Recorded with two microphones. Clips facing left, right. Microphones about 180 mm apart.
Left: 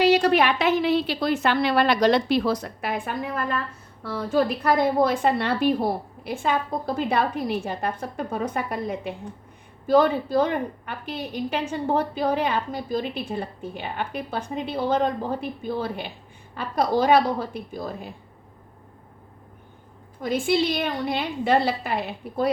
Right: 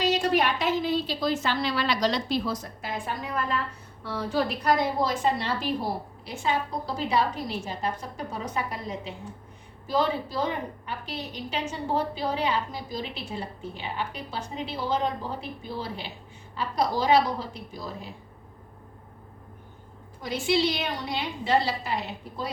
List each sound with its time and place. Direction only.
0.0 s a woman's voice: 65° left (ahead or behind)
20.2 s a woman's voice: 55° left (ahead or behind)